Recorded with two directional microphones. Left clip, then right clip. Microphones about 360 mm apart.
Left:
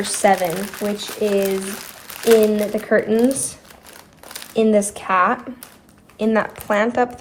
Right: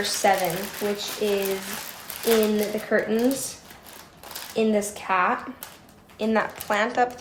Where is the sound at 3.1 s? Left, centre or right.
Centre.